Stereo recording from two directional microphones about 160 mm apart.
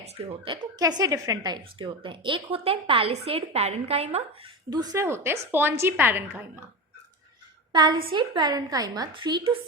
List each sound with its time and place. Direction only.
0.0 s speech: 40° right (ahead or behind)
4.7 s a woman's voice: 25° right (ahead or behind)
7.7 s a woman's voice: 25° right (ahead or behind)